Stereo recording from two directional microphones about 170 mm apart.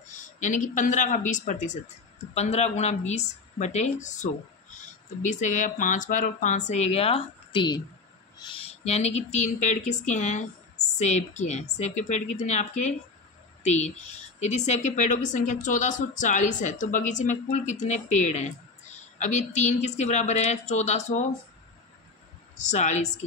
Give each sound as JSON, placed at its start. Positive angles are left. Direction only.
{"t": 0.1, "sound": "a woman's voice", "side_deg": 45}
{"t": 22.7, "sound": "speech", "side_deg": 45}